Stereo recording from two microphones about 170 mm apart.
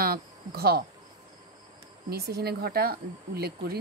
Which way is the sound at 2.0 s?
70° right (ahead or behind).